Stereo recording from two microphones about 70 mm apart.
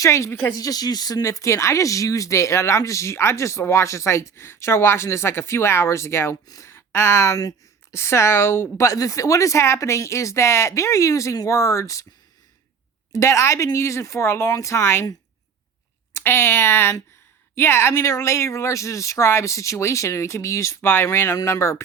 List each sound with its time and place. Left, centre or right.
0.0 s speech: left
0.5 s speech: left
8.9 s speech: left
13.1 s speech: left
16.1 s speech: left